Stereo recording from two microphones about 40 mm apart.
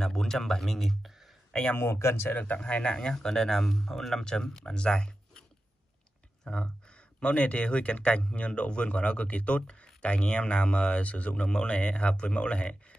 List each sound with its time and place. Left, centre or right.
0.0 s speech: centre
1.8 s speech: left
2.3 s speech: left
2.6 s speech: left
4.2 s speech: centre
6.4 s speech: left
11.4 s speech: left